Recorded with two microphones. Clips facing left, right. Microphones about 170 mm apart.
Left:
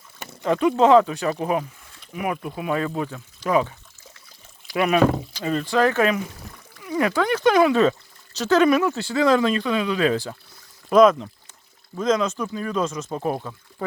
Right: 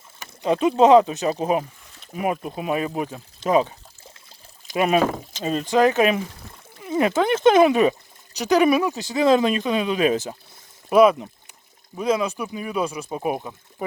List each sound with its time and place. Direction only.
0.4 s speech: 20° right (ahead or behind)